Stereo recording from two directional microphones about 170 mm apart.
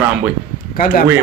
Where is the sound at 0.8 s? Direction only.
55° left (ahead or behind).